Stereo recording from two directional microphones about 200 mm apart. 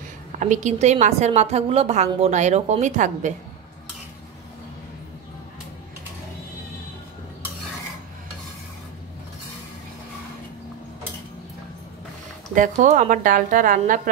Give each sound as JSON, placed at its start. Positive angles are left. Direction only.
{"t": 0.4, "sound": "a woman's voice", "side_deg": -35}
{"t": 12.5, "sound": "a woman's voice", "side_deg": -40}